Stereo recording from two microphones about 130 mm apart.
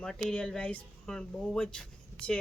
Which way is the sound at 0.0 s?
5° left (ahead or behind).